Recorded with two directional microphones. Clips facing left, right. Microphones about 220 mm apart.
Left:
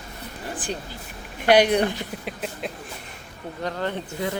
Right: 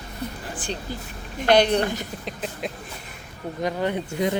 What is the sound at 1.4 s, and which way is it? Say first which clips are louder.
Speech: left 1 dB; 10° left (ahead or behind).